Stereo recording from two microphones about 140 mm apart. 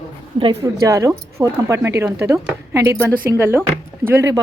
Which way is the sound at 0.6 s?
20° right (ahead or behind).